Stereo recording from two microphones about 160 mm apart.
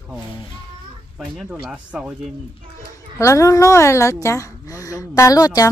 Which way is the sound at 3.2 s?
20° left (ahead or behind).